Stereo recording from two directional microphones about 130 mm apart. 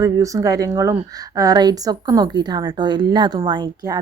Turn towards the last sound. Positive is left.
turn(degrees=-30)  # may be behind; listen again after turning